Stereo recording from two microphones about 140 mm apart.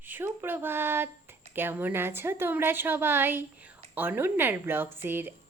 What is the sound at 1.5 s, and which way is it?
A woman's voice, 15° right (ahead or behind).